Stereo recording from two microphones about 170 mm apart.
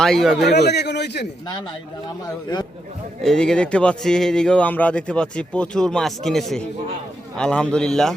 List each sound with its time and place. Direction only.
0.0 s speech: centre (ahead or behind)
0.4 s a man's voice: 80° left
3.2 s speech: 5° left (ahead or behind)